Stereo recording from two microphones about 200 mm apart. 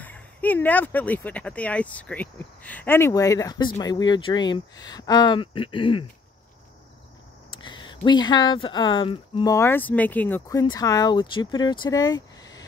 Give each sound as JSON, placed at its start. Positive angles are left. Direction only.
{"t": 0.0, "sound": "speech", "side_deg": 10}
{"t": 7.5, "sound": "speech", "side_deg": 25}